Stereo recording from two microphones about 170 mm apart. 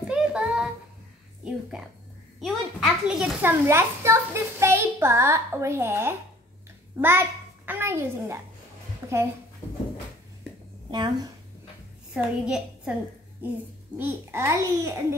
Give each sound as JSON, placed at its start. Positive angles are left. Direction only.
{"t": 0.1, "sound": "music", "side_deg": -5}
{"t": 1.4, "sound": "a woman's voice", "side_deg": -5}
{"t": 9.0, "sound": "a sound", "side_deg": -15}
{"t": 10.9, "sound": "speech", "side_deg": -25}
{"t": 12.1, "sound": "a woman's voice", "side_deg": -5}